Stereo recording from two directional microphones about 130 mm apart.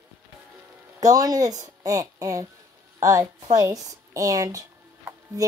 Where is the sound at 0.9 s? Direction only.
30° right (ahead or behind).